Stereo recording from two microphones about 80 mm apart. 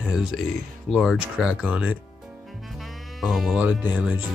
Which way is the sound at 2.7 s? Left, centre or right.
Centre.